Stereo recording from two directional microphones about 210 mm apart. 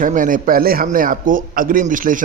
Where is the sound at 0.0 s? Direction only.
40° right (ahead or behind).